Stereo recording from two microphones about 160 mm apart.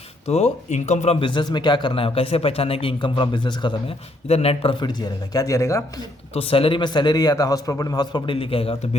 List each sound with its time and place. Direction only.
0.3 s a man's voice: 45° left (ahead or behind); by 5.8 s 20° left (ahead or behind)
6.3 s a man's voice: 35° left (ahead or behind)